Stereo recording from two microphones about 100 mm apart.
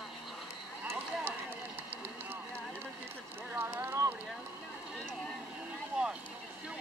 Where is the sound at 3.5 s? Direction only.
25° right (ahead or behind).